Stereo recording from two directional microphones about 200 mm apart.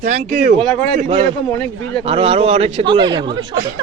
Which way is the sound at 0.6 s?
5° left (ahead or behind).